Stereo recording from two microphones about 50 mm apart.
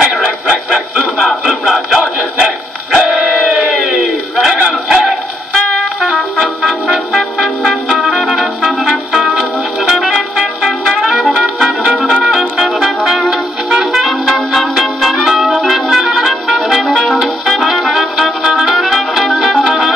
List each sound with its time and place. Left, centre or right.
0.0 s a sound: centre
1.4 s music: centre
2.3 s dog: centre
3.1 s crowd: centre
4.8 s music: centre
6.1 s music: centre
14.0 s music: centre